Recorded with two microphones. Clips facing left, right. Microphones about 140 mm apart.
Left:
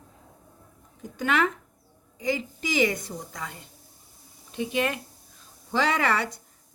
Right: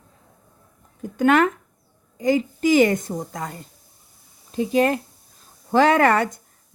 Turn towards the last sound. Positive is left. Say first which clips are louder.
# right 8 dB
turn(degrees=-50)  # may be behind; listen again after turning